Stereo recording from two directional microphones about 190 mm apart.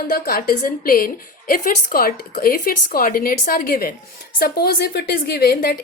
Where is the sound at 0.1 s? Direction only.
50° left (ahead or behind).